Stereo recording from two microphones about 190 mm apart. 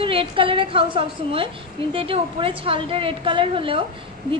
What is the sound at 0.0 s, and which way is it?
A woman's voice, 30° right (ahead or behind).